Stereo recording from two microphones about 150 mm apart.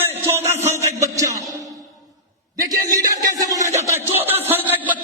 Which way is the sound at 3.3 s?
25° right (ahead or behind).